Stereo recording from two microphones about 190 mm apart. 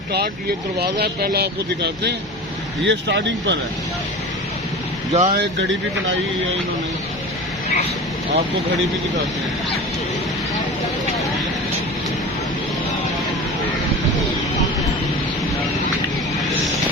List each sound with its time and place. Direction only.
0.8 s speech: 55° right (ahead or behind)
5.1 s speech: 40° right (ahead or behind)